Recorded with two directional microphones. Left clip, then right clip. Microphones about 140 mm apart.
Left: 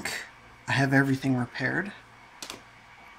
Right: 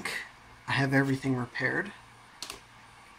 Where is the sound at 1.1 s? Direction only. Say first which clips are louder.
Left 3 dB; 50° left (ahead or behind).